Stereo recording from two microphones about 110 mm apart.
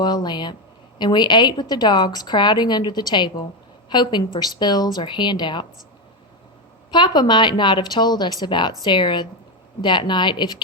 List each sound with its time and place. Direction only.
0.0 s a woman's voice: 40° left (ahead or behind)
6.9 s a woman's voice: 45° left (ahead or behind)